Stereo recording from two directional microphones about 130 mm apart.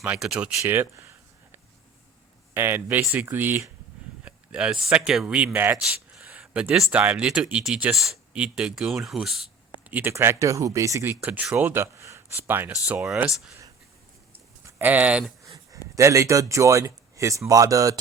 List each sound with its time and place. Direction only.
0.0 s speech: 5° right (ahead or behind)
0.6 s speech: 15° right (ahead or behind)
2.6 s speech: 15° right (ahead or behind)
5.8 s speech: 5° right (ahead or behind)
9.9 s speech: 15° right (ahead or behind)
14.8 s speech: 15° right (ahead or behind)
15.4 s a sound: 25° right (ahead or behind)
16.0 s speech: 25° right (ahead or behind)